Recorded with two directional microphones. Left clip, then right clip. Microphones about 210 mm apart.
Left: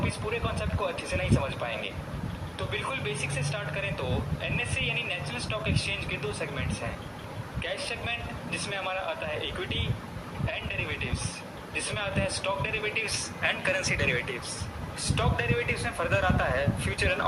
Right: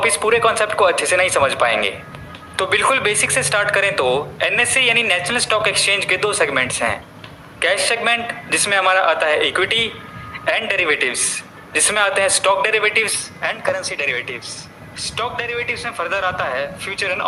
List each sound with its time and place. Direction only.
0.0 s speech: 35° right (ahead or behind)